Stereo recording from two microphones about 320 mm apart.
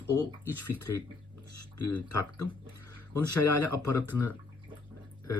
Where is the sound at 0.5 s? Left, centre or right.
Left.